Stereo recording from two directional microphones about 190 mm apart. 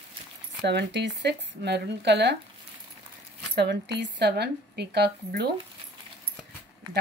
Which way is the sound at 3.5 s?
65° right (ahead or behind).